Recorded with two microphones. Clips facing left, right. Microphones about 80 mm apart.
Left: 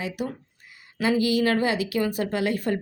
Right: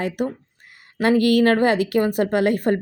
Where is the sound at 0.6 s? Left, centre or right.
Right.